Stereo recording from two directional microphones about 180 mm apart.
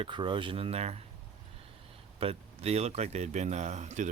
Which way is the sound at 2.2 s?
35° right (ahead or behind).